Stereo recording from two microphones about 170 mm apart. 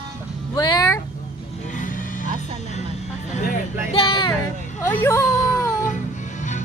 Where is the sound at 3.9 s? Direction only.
35° left (ahead or behind).